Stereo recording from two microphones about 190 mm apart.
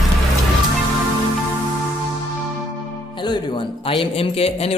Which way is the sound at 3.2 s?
25° left (ahead or behind).